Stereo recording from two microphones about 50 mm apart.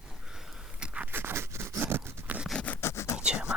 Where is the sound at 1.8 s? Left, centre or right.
Right.